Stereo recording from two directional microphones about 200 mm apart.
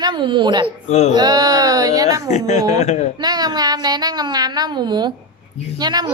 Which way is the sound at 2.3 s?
35° left (ahead or behind).